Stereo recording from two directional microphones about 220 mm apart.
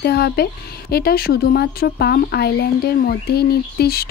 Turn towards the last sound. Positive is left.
turn(degrees=45)  # may be behind; listen again after turning